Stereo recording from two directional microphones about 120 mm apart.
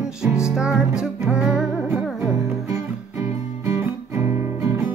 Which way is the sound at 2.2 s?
25° right (ahead or behind).